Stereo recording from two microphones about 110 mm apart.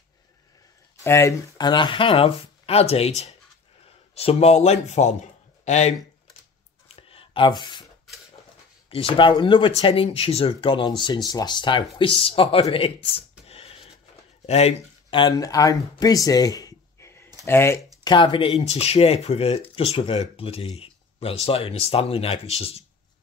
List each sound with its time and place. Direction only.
1.0 s speech: 25° left (ahead or behind)
1.6 s a man's voice: 45° left (ahead or behind); by 5.9 s 90° left
7.0 s a sound: 55° left (ahead or behind)
8.9 s speech: 55° left (ahead or behind)
9.8 s speech: 60° left (ahead or behind)
12.7 s a sound: 60° left (ahead or behind)
15.3 s speech: 30° left (ahead or behind)
18.0 s speech: 45° left (ahead or behind); by 22.8 s 65° left (ahead or behind)